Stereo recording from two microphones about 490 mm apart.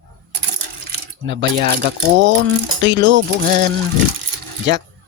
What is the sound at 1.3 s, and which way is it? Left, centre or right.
Speech, right.